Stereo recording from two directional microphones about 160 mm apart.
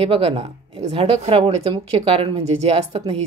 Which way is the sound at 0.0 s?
35° right (ahead or behind).